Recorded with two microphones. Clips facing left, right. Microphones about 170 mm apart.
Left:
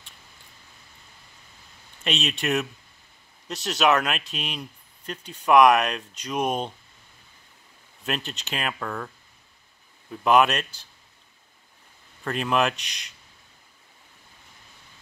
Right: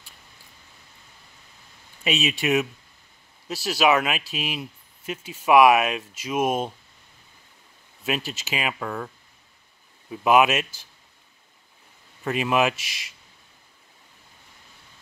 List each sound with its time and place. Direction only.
2.0 s speech: centre (ahead or behind)
8.0 s speech: 5° right (ahead or behind)
12.3 s speech: 5° right (ahead or behind)